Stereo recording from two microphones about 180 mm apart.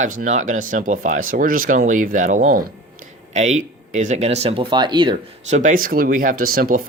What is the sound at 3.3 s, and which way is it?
Speech, 40° right (ahead or behind).